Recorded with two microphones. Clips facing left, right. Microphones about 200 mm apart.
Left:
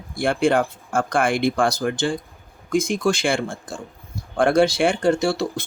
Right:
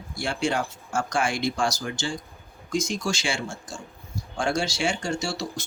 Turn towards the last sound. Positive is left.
turn(degrees=55)  # may be behind; listen again after turning